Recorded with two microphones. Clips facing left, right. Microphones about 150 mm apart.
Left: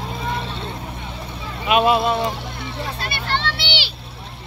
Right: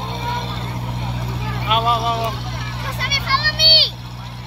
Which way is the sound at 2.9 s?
70° right (ahead or behind).